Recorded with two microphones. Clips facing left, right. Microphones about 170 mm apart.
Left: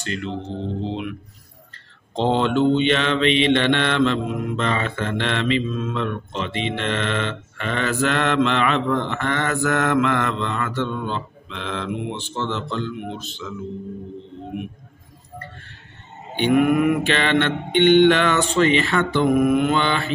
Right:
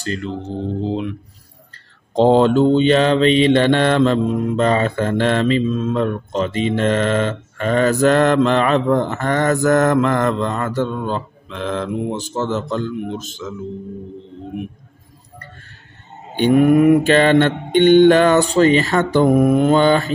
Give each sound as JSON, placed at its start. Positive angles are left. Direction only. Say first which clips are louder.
{"t": 0.0, "sound": "mantra", "louder": "right 3 dB", "side_deg": -40}
{"t": 2.1, "sound": "mantra", "louder": "right 7 dB", "side_deg": -40}
{"t": 16.3, "sound": "mantra", "louder": "right 5 dB", "side_deg": -35}